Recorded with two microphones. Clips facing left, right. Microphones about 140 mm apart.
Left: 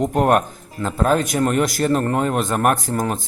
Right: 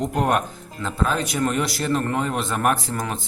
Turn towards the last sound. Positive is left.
turn(degrees=45)  # may be behind; listen again after turning